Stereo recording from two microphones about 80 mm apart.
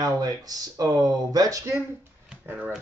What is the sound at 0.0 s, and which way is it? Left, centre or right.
Speech, right.